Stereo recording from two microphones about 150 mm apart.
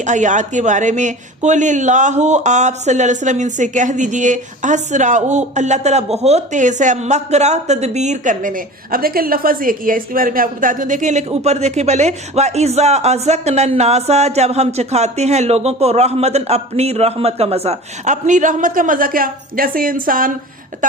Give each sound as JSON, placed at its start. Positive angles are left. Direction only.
{"t": 0.0, "sound": "speech", "side_deg": -55}